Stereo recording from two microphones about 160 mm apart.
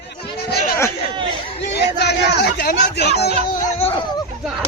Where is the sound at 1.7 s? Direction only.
90° left.